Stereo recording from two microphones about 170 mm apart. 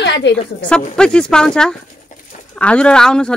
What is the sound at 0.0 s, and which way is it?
Speech, 90° left.